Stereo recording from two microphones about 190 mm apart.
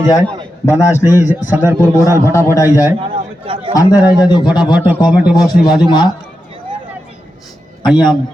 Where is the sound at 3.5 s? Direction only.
30° right (ahead or behind).